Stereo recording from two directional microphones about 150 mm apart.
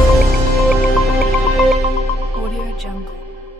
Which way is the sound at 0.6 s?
Centre (ahead or behind).